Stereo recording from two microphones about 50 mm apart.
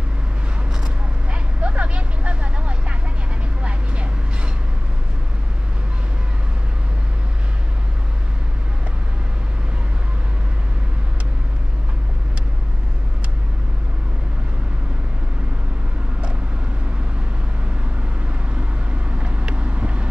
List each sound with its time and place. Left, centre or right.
1.3 s vehicle: right
19.0 s vehicle: right